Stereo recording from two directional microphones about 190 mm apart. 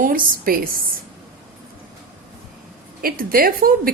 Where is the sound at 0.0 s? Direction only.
50° right (ahead or behind).